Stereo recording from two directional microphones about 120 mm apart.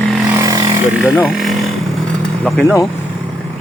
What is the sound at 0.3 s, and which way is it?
Vehicle, 25° right (ahead or behind).